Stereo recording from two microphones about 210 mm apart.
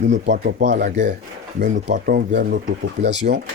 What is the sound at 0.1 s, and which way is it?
Speech, 50° right (ahead or behind).